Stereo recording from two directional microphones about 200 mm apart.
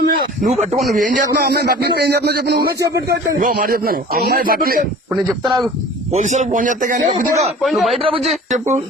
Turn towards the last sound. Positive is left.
turn(degrees=0)  # may be behind; listen again after turning